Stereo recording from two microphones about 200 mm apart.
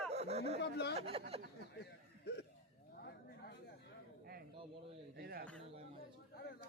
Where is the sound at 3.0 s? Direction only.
50° left (ahead or behind).